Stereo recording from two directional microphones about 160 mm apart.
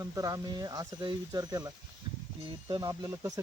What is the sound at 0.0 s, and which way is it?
Speech, 20° right (ahead or behind).